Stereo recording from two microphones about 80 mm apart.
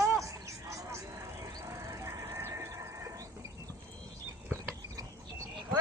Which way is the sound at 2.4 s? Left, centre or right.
Right.